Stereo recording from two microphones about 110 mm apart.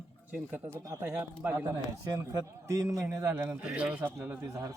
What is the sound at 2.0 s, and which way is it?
A man's voice, 30° right (ahead or behind).